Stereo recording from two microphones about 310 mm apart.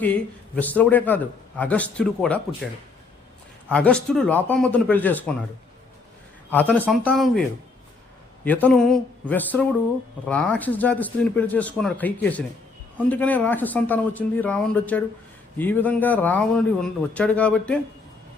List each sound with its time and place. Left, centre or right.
0.0 s a man's voice: centre
3.7 s a man's voice: centre
6.5 s a man's voice: centre
8.4 s a man's voice: centre